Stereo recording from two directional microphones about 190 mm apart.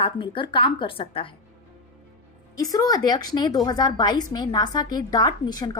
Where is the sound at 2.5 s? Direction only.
20° left (ahead or behind).